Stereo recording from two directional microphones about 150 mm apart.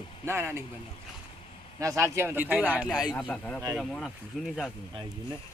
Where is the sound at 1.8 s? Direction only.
20° right (ahead or behind).